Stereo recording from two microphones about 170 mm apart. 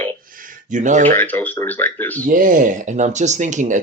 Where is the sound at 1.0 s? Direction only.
10° left (ahead or behind).